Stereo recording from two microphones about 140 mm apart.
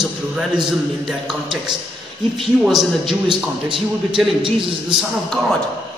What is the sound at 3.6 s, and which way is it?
Speech, 35° right (ahead or behind).